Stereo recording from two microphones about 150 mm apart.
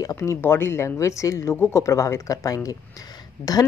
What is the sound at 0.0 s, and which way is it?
Speech, 20° left (ahead or behind).